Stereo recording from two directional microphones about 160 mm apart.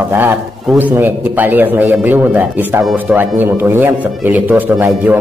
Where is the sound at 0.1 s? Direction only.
15° right (ahead or behind).